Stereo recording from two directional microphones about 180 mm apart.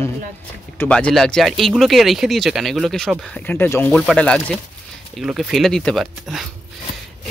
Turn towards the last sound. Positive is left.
turn(degrees=0)  # may be behind; listen again after turning